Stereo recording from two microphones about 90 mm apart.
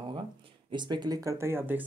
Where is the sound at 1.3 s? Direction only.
30° right (ahead or behind).